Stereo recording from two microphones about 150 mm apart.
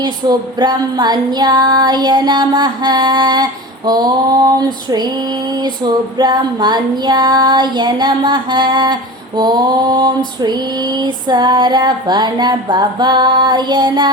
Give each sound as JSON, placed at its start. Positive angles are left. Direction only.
{"t": 0.0, "sound": "female singing", "side_deg": -30}